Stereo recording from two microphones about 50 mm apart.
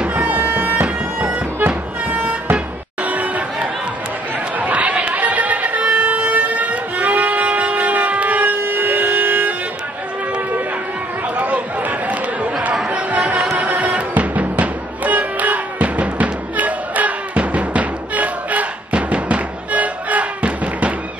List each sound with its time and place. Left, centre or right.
0.1 s bagpipes: right
0.8 s bagpipes: right
1.7 s music: right
2.5 s a sound: right
4.6 s music: right
11.3 s a sound: right
12.8 s music: right